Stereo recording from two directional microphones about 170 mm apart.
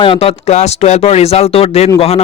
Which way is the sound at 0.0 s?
35° left (ahead or behind).